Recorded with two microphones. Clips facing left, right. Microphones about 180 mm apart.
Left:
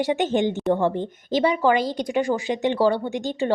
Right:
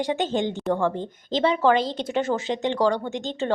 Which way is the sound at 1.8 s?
25° right (ahead or behind).